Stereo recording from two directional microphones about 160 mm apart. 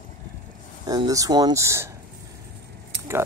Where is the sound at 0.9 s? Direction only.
20° right (ahead or behind).